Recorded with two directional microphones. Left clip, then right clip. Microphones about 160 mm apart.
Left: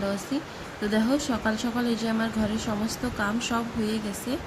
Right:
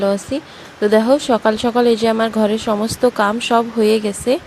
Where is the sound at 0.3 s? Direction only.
45° right (ahead or behind).